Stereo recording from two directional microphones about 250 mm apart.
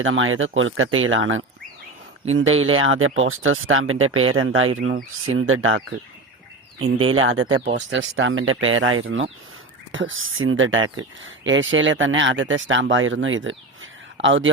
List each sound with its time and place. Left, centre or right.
0.0 s speech: right
7.1 s speech: right